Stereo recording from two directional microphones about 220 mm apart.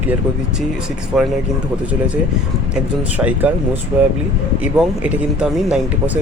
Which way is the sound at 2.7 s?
5° right (ahead or behind).